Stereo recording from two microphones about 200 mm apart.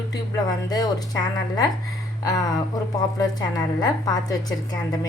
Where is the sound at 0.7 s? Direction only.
20° left (ahead or behind).